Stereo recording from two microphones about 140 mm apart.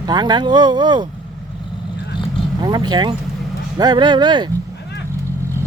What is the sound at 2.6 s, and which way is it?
Speech, 30° right (ahead or behind).